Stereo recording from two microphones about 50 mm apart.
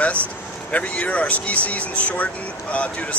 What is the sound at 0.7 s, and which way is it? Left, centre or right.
Speech, left.